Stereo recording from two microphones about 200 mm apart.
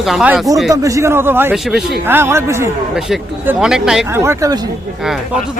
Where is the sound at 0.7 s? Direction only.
15° right (ahead or behind).